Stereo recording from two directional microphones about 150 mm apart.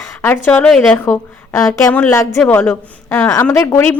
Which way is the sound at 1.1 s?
20° left (ahead or behind).